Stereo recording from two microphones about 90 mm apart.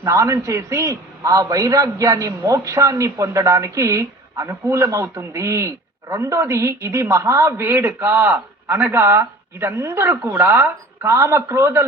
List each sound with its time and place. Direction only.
0.0 s a man's voice: 35° right (ahead or behind)